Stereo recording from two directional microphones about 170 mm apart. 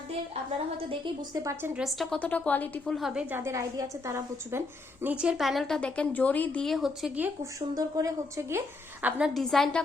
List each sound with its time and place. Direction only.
0.8 s a woman's voice: 30° right (ahead or behind)
1.5 s a woman's voice: 15° right (ahead or behind)
1.8 s a woman's voice: centre (ahead or behind)
2.8 s a woman's voice: centre (ahead or behind); by 4.6 s 15° right (ahead or behind)
5.0 s a woman's voice: 5° right (ahead or behind)
7.8 s a woman's voice: 20° right (ahead or behind); by 9.8 s 5° left (ahead or behind)